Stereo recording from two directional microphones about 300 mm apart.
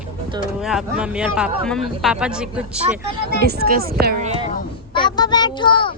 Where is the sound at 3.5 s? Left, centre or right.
Right.